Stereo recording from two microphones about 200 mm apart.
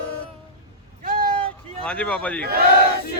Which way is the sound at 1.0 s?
45° right (ahead or behind).